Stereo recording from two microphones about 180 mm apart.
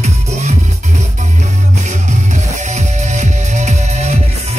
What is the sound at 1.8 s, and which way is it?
Music, 40° right (ahead or behind).